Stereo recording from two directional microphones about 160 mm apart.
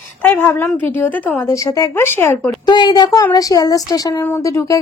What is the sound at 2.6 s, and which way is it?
Speech, 25° left (ahead or behind).